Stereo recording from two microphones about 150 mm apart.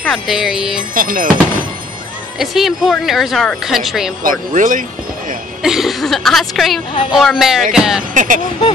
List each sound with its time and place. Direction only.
0.0 s speech: centre (ahead or behind)
0.9 s speech: 65° right (ahead or behind)
2.3 s speech: centre (ahead or behind)
4.2 s speech: 65° right (ahead or behind)
5.6 s speech: 5° right (ahead or behind)
8.1 s speech: 60° right (ahead or behind)